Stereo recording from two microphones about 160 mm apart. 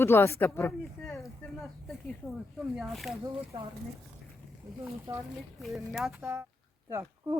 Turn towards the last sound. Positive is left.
turn(degrees=-15)  # may be behind; listen again after turning